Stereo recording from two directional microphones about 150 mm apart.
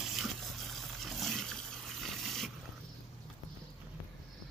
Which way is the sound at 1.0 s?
Centre (ahead or behind).